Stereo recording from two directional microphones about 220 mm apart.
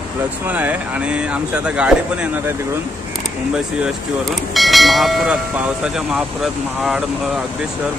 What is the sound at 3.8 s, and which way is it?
Speech, centre (ahead or behind).